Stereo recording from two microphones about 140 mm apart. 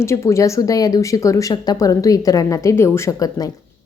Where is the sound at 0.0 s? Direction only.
20° left (ahead or behind).